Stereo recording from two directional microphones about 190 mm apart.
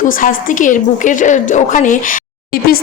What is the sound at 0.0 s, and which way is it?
A woman's voice, 45° left (ahead or behind).